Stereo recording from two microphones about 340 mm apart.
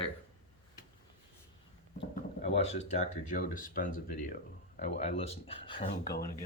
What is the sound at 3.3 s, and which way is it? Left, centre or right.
Speech, left.